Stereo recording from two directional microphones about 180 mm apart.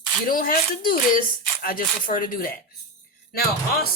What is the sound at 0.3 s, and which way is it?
Speech, 50° left (ahead or behind).